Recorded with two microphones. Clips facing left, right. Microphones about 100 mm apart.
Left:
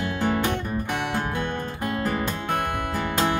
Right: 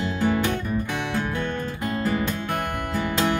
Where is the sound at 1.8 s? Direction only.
50° left (ahead or behind).